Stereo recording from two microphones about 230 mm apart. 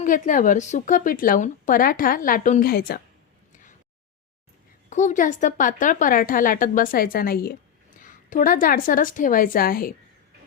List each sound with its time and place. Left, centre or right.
0.0 s speech: left
4.9 s speech: left